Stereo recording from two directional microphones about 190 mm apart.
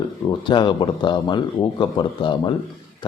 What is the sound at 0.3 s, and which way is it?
Speech, 25° left (ahead or behind).